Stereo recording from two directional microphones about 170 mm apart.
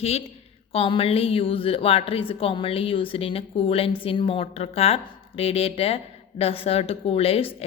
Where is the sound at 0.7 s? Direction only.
35° left (ahead or behind).